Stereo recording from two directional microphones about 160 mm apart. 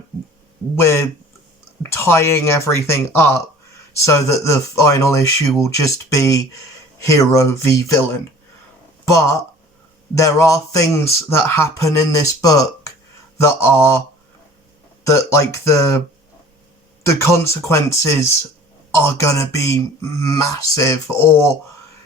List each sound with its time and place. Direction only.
0.8 s speech: 15° left (ahead or behind)
10.2 s speech: 20° left (ahead or behind)
15.0 s speech: 20° left (ahead or behind)
17.1 s speech: 15° left (ahead or behind)